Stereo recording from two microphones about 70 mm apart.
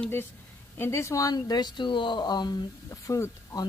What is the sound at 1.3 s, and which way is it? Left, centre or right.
Speech, left.